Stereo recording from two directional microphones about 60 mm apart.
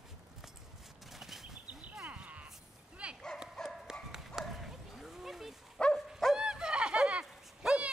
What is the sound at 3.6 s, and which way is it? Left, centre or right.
Horse, centre.